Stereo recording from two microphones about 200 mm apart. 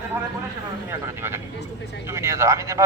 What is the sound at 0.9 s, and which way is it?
A man's voice, 10° right (ahead or behind).